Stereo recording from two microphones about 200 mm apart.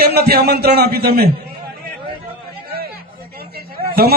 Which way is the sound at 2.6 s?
50° right (ahead or behind).